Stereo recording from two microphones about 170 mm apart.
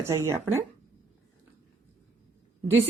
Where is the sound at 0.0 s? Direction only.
15° right (ahead or behind).